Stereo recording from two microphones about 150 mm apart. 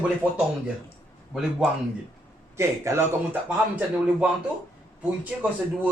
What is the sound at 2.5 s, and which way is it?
Speech, 20° right (ahead or behind).